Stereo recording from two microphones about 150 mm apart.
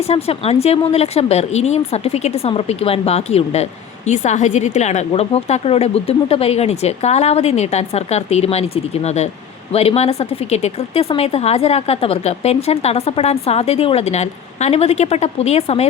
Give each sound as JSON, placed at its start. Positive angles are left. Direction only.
{"t": 0.1, "sound": "speech", "side_deg": 45}